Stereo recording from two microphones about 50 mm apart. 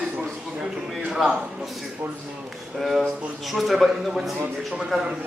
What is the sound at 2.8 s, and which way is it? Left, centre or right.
A man's voice, centre.